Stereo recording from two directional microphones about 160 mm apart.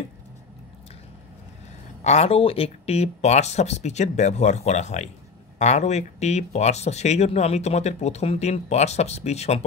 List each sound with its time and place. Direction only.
2.0 s speech: 40° left (ahead or behind)